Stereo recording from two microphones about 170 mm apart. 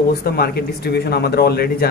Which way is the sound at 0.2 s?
65° left (ahead or behind).